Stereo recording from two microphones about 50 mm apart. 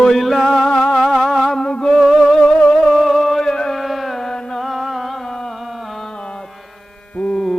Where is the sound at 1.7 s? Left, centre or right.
Centre.